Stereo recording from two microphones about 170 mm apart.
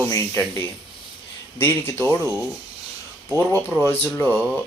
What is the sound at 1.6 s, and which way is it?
Speech, 15° left (ahead or behind).